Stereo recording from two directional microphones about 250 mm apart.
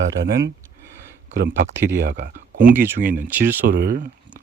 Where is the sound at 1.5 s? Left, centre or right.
Right.